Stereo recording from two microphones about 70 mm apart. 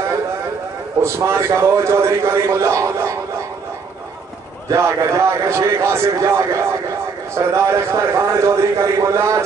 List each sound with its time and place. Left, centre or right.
1.0 s a man's voice: right
4.6 s a man's voice: right